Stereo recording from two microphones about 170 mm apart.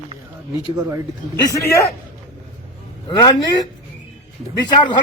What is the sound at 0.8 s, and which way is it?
Speech, 15° right (ahead or behind).